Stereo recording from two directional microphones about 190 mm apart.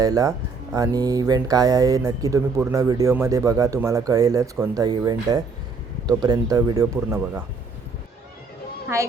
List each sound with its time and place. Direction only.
0.0 s speech: 20° right (ahead or behind)